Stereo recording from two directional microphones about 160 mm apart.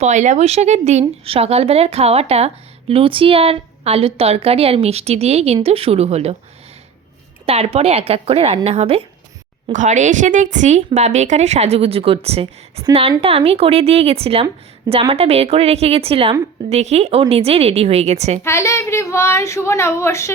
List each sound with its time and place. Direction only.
0.0 s a woman's voice: 50° right (ahead or behind)
7.4 s a woman's voice: 40° right (ahead or behind)
9.7 s a woman's voice: 50° right (ahead or behind)
18.4 s a woman's voice: 15° left (ahead or behind)